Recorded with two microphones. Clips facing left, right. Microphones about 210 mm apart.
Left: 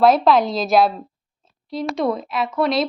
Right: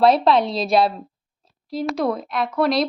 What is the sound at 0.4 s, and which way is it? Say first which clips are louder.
Speech: left 1 dB; 30° right (ahead or behind).